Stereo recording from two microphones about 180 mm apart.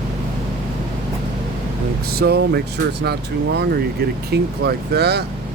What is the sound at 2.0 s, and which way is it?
Speech, 60° right (ahead or behind).